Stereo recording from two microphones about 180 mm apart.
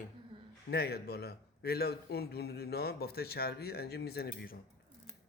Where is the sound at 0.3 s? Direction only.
30° right (ahead or behind).